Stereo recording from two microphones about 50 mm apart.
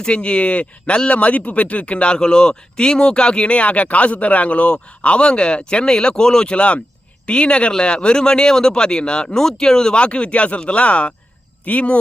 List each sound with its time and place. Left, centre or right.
0.0 s speech: left